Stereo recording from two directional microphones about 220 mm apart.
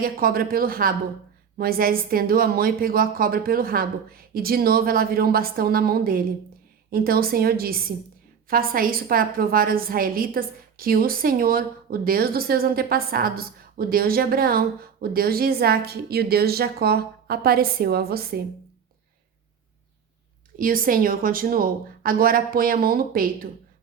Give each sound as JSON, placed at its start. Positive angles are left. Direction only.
{"t": 0.0, "sound": "a woman's voice", "side_deg": -40}
{"t": 20.6, "sound": "a woman's voice", "side_deg": -40}